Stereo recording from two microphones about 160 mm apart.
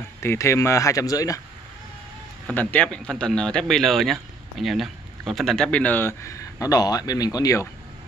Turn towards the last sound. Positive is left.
turn(degrees=20)  # may be behind; listen again after turning